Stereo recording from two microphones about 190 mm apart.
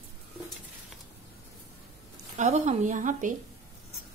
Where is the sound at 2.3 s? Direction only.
35° right (ahead or behind).